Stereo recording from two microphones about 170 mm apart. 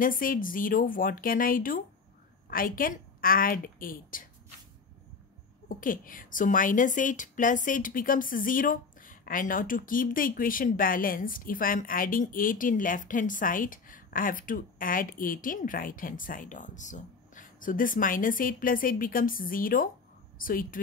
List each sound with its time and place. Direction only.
0.0 s speech: 55° left (ahead or behind)
5.7 s a woman's voice: 55° left (ahead or behind)